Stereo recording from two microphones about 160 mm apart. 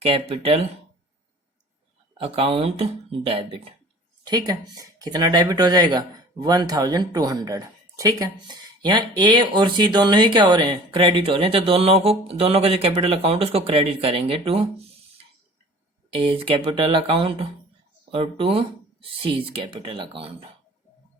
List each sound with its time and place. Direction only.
0.0 s speech: 35° right (ahead or behind)
2.1 s speech: 35° right (ahead or behind)
4.3 s speech: 25° right (ahead or behind)
16.0 s speech: 35° right (ahead or behind)